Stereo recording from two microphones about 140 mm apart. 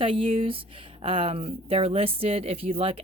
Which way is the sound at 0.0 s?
40° right (ahead or behind).